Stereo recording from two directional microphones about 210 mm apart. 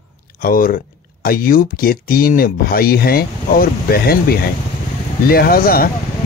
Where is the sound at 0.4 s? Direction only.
45° left (ahead or behind).